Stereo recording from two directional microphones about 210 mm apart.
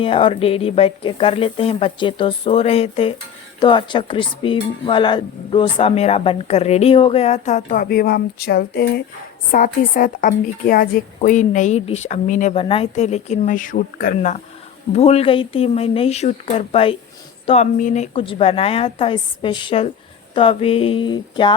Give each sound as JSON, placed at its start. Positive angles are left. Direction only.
{"t": 0.0, "sound": "a woman's voice", "side_deg": 25}